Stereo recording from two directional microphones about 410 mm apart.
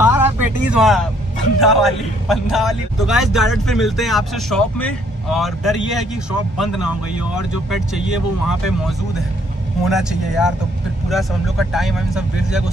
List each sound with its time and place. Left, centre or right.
0.0 s vehicle: centre
1.6 s a man's voice: centre
9.8 s a man's voice: centre